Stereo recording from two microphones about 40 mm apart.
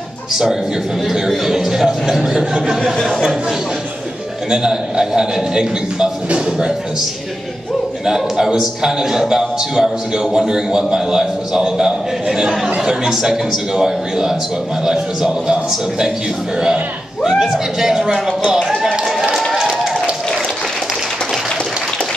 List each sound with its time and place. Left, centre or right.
0.3 s a man's voice: centre
4.5 s a man's voice: centre
8.0 s a man's voice: centre
17.2 s a man's voice: centre
18.7 s run: centre
19.5 s a sound: centre